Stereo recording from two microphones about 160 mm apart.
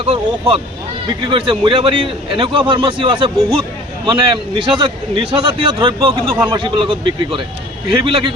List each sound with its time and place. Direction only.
0.0 s a man's voice: 35° right (ahead or behind)